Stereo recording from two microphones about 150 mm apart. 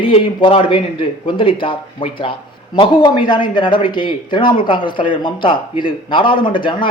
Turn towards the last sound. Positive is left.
turn(degrees=35)  # may be behind; listen again after turning